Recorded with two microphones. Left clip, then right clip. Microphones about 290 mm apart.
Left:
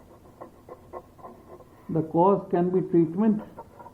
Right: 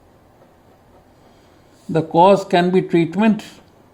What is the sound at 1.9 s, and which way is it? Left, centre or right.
Speech, right.